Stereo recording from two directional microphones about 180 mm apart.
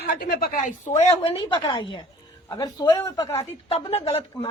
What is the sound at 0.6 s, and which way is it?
Speech, 40° left (ahead or behind).